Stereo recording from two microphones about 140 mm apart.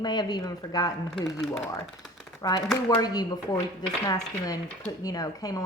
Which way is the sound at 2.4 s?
25° left (ahead or behind).